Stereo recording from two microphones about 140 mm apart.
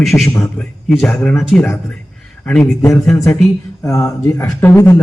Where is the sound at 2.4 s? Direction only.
5° left (ahead or behind).